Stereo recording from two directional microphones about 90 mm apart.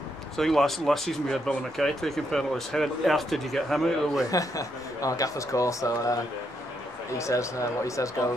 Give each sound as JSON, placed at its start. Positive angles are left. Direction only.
{"t": 0.4, "sound": "speech", "side_deg": 0}
{"t": 4.3, "sound": "speech", "side_deg": 40}
{"t": 7.2, "sound": "speech", "side_deg": 35}